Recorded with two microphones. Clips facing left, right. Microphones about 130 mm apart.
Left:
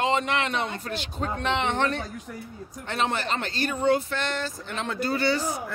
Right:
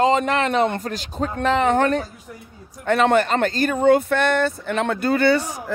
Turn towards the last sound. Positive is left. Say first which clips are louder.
# right 7 dB
turn(degrees=-55)  # may be behind; listen again after turning